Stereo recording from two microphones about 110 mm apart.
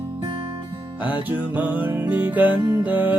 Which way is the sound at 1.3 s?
15° right (ahead or behind).